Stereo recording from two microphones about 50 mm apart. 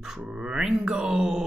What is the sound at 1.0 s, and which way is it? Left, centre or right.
Mantra, centre.